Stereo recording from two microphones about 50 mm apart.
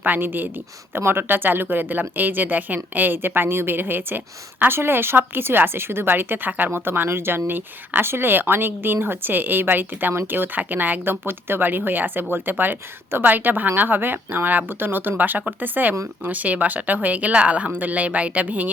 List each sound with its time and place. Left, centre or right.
0.0 s speech: right